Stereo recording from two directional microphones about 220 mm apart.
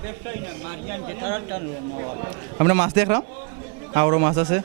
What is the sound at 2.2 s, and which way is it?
A man's voice, 20° right (ahead or behind).